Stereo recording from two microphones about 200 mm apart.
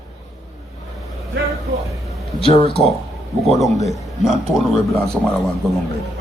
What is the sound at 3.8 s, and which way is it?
A man's voice, centre (ahead or behind).